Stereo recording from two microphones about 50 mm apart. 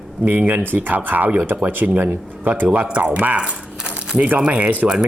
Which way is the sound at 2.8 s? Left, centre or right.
Right.